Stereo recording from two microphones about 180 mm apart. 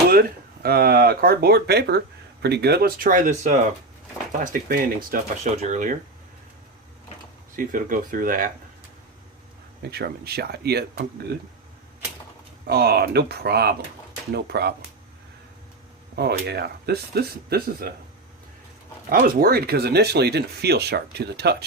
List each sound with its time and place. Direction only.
0.1 s speech: 60° right (ahead or behind); by 6.0 s 45° right (ahead or behind)
7.5 s speech: 50° right (ahead or behind)
9.9 s speech: 60° right (ahead or behind)
12.6 s speech: 60° right (ahead or behind)
16.1 s speech: 65° right (ahead or behind)
19.0 s speech: 55° right (ahead or behind)